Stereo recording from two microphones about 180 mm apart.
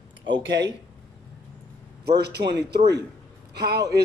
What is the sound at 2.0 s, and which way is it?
Speech, 65° right (ahead or behind).